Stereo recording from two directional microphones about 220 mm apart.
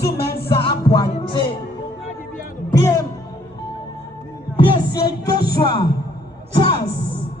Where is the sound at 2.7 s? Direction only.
15° left (ahead or behind).